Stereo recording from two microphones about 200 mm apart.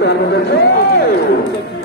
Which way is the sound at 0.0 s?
55° left (ahead or behind).